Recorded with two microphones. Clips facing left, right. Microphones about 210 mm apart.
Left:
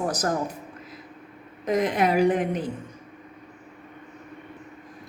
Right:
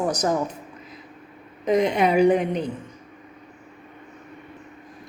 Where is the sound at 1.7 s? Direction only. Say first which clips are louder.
Right 3 dB; centre (ahead or behind).